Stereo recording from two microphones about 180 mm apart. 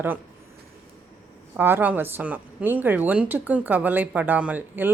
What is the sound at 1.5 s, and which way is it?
Speech, 10° right (ahead or behind).